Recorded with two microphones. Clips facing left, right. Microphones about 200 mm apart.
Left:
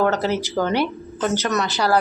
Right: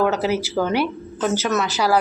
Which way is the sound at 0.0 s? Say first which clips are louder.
Even; 5° right (ahead or behind).